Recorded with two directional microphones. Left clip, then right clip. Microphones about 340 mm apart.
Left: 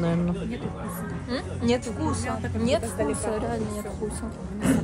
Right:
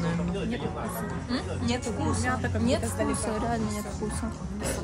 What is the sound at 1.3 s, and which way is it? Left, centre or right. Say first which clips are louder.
A woman's voice: left 6 dB; left.